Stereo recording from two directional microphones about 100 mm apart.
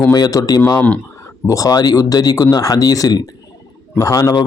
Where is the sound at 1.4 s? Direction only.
35° left (ahead or behind).